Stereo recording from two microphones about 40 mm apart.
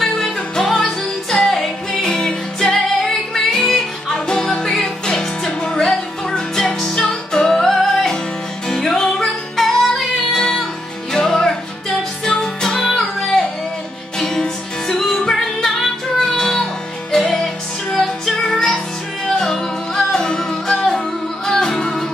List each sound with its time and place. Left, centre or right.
0.0 s music: centre